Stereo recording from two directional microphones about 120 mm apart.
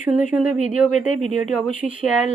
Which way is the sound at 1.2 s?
80° left.